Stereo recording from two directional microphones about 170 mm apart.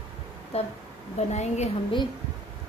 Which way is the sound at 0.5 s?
35° left (ahead or behind).